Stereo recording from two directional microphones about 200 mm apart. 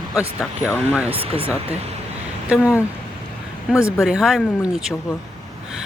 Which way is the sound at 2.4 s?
5° right (ahead or behind).